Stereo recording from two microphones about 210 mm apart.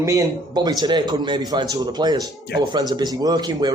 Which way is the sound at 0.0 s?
15° right (ahead or behind).